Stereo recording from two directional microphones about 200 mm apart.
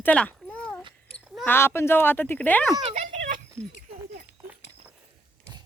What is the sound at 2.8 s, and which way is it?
Speech, 30° right (ahead or behind).